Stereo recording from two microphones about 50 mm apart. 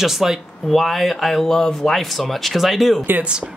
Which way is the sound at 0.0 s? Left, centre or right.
Centre.